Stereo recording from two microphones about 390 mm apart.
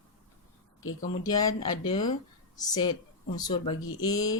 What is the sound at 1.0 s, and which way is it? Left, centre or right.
Mantra, centre.